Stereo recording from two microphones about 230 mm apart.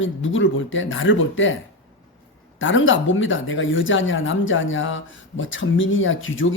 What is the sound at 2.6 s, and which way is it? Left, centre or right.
A woman's voice, left.